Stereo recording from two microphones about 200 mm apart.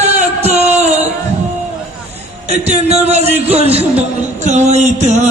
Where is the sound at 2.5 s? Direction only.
30° right (ahead or behind).